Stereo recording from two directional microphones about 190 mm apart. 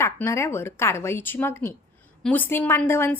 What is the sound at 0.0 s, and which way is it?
A woman's voice, 15° left (ahead or behind).